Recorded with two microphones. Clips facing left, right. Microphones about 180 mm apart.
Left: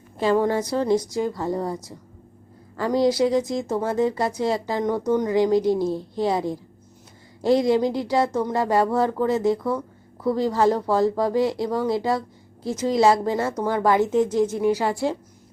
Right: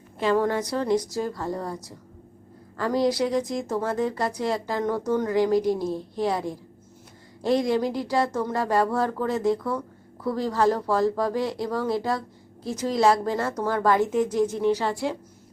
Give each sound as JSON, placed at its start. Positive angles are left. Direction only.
{"t": 0.2, "sound": "speech", "side_deg": 30}
{"t": 14.5, "sound": "a woman's voice", "side_deg": 10}